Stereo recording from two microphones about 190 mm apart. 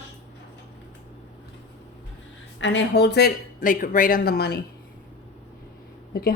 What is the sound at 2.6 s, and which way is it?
Speech, 70° left (ahead or behind).